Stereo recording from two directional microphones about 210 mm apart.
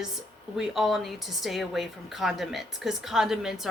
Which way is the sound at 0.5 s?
Centre (ahead or behind).